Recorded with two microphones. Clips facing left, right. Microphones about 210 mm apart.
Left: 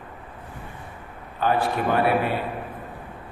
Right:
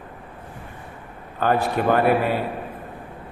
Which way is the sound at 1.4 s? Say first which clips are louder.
Right 2 dB; 45° right (ahead or behind).